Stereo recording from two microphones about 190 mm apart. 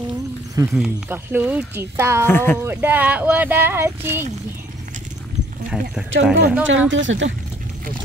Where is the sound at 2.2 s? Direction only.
10° left (ahead or behind).